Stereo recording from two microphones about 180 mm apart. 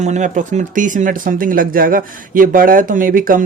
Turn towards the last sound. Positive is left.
turn(degrees=-50)  # may be behind; listen again after turning